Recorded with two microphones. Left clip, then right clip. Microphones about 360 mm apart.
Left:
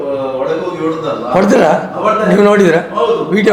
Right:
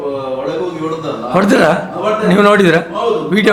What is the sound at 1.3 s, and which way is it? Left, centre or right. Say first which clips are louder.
A man's voice: left 1 dB; right.